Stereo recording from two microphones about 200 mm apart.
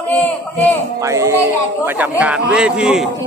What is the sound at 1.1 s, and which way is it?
A man's voice, 15° right (ahead or behind).